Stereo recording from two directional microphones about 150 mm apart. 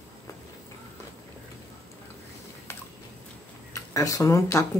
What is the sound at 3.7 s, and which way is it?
Speech, 20° left (ahead or behind).